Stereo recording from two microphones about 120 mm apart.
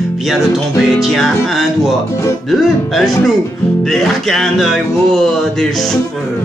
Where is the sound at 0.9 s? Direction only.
Centre (ahead or behind).